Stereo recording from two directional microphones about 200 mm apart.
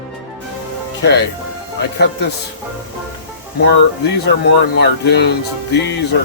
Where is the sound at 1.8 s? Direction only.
55° left (ahead or behind).